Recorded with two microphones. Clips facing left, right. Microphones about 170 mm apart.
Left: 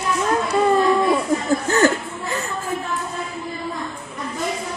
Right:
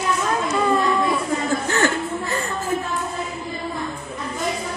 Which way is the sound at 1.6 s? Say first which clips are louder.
Left 6 dB; 40° left (ahead or behind).